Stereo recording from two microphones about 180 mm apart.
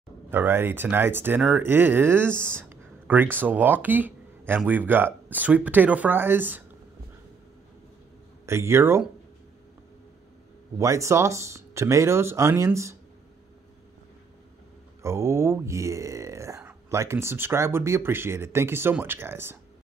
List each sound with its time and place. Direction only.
0.3 s speech: 10° right (ahead or behind)
8.5 s speech: 15° right (ahead or behind)
10.8 s speech: 15° right (ahead or behind)
15.0 s speech: 15° right (ahead or behind)